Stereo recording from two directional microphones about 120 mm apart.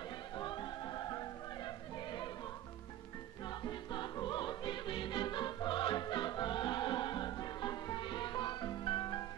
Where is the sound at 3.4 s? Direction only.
40° left (ahead or behind).